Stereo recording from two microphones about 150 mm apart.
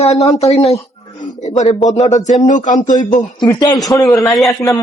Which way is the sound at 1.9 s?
45° left (ahead or behind).